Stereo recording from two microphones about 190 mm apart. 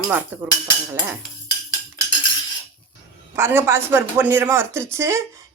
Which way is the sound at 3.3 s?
15° right (ahead or behind).